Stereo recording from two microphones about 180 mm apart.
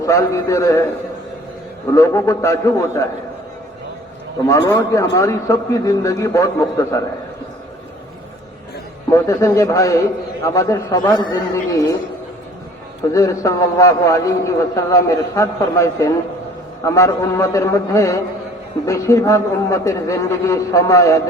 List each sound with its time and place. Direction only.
0.0 s a man's voice: 15° left (ahead or behind)
1.9 s a man's voice: 15° left (ahead or behind)
4.4 s a man's voice: 20° left (ahead or behind)
9.0 s a man's voice: 20° left (ahead or behind)
13.1 s a man's voice: 15° left (ahead or behind)